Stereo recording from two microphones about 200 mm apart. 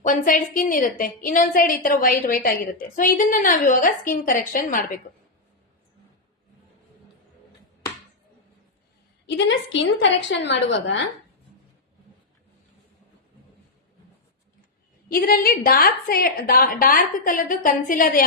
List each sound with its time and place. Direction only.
0.0 s a woman's voice: 40° left (ahead or behind)
9.2 s a woman's voice: 60° left (ahead or behind)
15.1 s a woman's voice: 50° left (ahead or behind)